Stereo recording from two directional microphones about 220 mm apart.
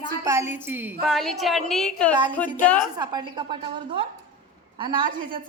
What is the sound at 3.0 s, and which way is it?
A woman's voice, 20° right (ahead or behind).